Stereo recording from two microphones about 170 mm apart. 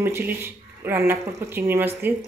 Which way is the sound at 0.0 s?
15° right (ahead or behind).